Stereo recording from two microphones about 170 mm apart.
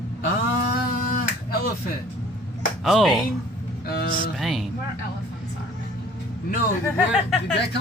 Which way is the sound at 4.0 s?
55° left (ahead or behind).